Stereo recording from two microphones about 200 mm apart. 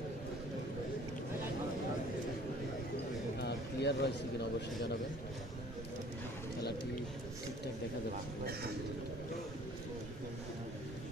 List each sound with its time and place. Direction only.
3.3 s a man's voice: 55° left (ahead or behind)